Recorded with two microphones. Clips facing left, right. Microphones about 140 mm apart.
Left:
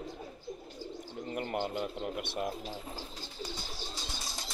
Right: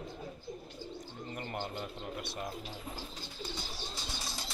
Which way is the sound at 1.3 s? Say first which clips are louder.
Left 6 dB; 55° left (ahead or behind).